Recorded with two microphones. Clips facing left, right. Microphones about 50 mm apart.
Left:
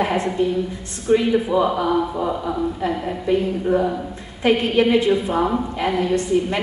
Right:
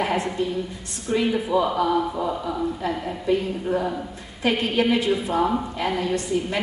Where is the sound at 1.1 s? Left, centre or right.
Left.